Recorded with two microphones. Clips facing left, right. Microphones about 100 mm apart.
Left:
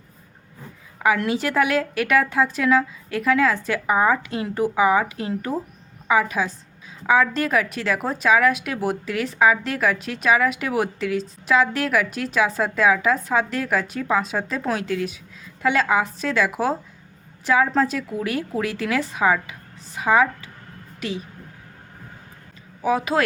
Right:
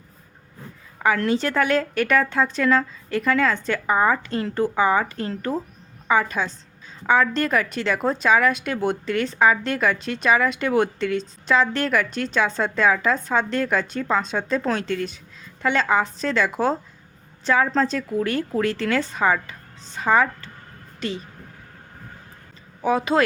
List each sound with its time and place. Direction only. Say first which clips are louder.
0.9 s a woman's voice: even; 10° left (ahead or behind)
22.8 s speech: right 1 dB; 5° left (ahead or behind)